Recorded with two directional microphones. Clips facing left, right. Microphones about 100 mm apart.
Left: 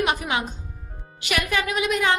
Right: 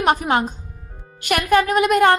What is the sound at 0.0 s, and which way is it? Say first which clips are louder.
A woman's voice: right 6 dB; 45° right (ahead or behind).